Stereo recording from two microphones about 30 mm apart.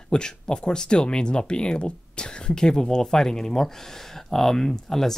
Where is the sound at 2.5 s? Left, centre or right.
Left.